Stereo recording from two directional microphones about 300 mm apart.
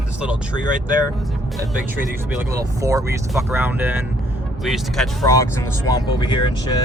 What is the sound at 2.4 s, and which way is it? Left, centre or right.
Speech, centre.